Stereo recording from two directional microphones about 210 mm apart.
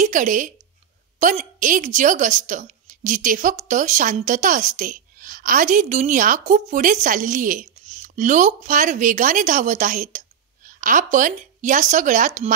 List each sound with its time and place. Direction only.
0.0 s a woman's voice: 40° right (ahead or behind)